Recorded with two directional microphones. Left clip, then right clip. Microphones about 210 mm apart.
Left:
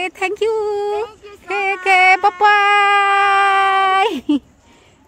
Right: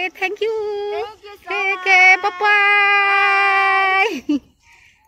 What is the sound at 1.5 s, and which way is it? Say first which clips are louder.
Speech: left 1 dB; 20° left (ahead or behind).